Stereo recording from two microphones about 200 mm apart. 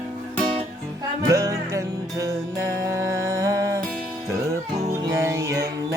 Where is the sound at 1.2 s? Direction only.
15° right (ahead or behind).